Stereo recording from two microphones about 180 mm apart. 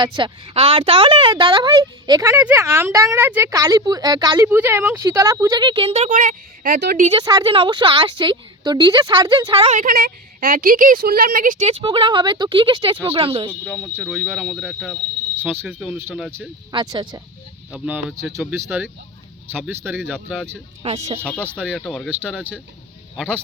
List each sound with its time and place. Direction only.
0.0 s a woman's voice: 25° right (ahead or behind)
2.3 s a woman's voice: 10° right (ahead or behind); by 7.1 s 50° right (ahead or behind)
7.1 s a woman's voice: 25° right (ahead or behind)
9.7 s a woman's voice: 50° right (ahead or behind)
11.7 s a woman's voice: 30° right (ahead or behind)
13.5 s speech: 10° left (ahead or behind)
15.4 s speech: 10° right (ahead or behind)
16.7 s a woman's voice: 20° right (ahead or behind)
17.7 s speech: 5° right (ahead or behind)
20.8 s speech: 35° right (ahead or behind)
21.6 s speech: 5° right (ahead or behind)